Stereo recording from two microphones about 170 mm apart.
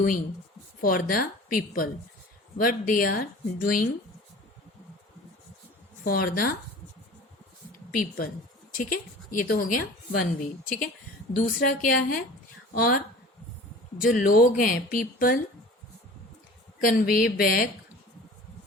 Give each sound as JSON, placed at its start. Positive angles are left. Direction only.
{"t": 0.0, "sound": "speech", "side_deg": 55}
{"t": 6.1, "sound": "speech", "side_deg": 60}
{"t": 7.9, "sound": "a woman's voice", "side_deg": 60}
{"t": 14.0, "sound": "speech", "side_deg": 55}
{"t": 16.8, "sound": "speech", "side_deg": 60}